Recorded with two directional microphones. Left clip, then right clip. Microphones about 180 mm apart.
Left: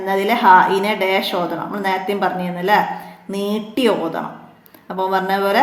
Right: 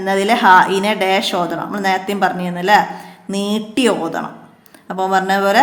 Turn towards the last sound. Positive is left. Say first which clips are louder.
# right 3 dB
turn(degrees=-25)  # may be behind; listen again after turning